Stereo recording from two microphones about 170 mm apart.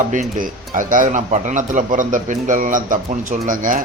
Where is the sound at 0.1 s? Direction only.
50° right (ahead or behind).